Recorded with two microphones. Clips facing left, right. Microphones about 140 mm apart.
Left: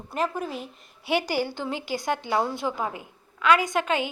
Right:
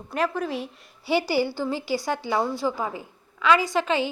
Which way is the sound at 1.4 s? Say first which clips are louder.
Right 4 dB; 15° left (ahead or behind).